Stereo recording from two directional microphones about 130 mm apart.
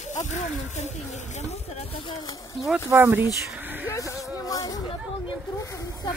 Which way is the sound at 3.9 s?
25° left (ahead or behind).